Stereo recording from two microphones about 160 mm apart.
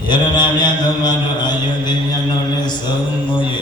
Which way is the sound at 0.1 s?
25° left (ahead or behind).